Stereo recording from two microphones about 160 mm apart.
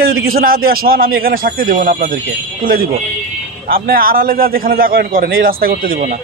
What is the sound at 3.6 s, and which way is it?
Speech, 65° right (ahead or behind).